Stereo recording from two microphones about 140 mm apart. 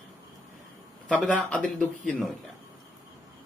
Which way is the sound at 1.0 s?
10° left (ahead or behind).